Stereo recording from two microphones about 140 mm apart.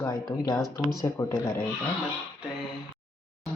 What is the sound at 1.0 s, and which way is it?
Speech, 20° left (ahead or behind).